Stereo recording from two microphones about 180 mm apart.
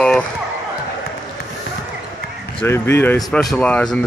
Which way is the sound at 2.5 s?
15° left (ahead or behind).